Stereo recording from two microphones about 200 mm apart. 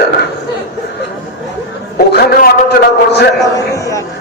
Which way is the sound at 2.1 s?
50° left (ahead or behind).